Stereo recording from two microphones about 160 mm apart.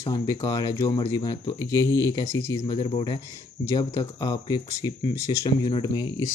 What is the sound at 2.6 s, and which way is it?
Speech, 35° left (ahead or behind).